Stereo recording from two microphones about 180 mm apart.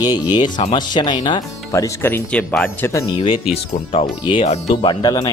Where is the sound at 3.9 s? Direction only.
30° left (ahead or behind).